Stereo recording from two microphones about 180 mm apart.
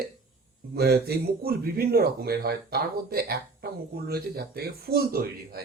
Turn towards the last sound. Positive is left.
turn(degrees=-55)  # may be behind; listen again after turning